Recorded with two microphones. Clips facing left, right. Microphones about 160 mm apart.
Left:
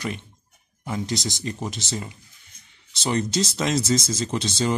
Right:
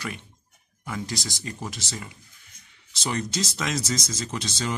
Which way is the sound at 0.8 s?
25° left (ahead or behind).